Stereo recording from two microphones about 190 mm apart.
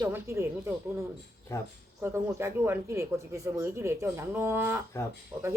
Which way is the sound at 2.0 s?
15° right (ahead or behind).